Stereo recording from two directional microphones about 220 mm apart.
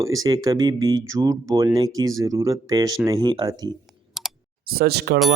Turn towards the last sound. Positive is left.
turn(degrees=-50)  # may be behind; listen again after turning